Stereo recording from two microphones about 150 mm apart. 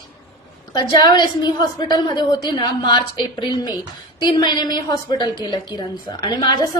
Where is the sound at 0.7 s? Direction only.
30° left (ahead or behind).